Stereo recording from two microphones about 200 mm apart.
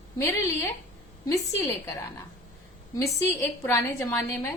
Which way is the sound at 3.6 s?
15° left (ahead or behind).